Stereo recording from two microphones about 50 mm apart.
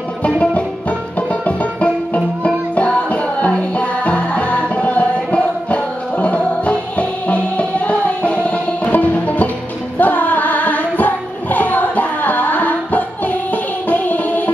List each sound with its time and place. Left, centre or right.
0.4 s music: left